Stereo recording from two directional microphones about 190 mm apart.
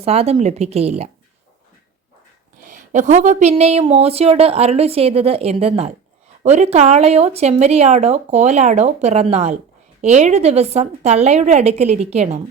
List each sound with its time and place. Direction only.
0.0 s speech: 35° right (ahead or behind)
2.6 s speech: 40° right (ahead or behind)